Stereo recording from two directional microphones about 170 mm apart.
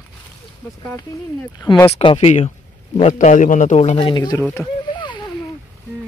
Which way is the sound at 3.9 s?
25° left (ahead or behind).